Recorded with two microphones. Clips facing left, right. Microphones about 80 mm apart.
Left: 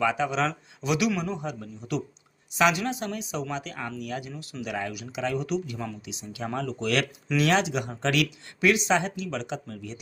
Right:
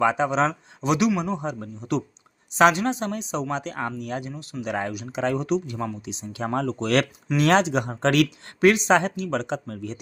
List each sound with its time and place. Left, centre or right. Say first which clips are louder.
0.0 s speech: right 4 dB; right